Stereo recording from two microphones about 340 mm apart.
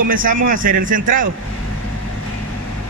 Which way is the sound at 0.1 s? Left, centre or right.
Right.